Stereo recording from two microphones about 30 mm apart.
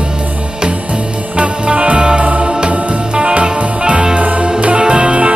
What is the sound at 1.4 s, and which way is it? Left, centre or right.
Music, right.